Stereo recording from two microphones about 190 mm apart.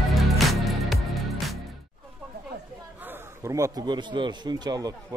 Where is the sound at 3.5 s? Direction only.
15° right (ahead or behind).